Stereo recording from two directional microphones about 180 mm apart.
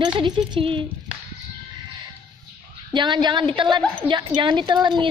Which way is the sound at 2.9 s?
25° right (ahead or behind).